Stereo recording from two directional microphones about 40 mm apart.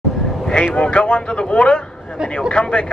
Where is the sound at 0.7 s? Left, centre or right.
Left.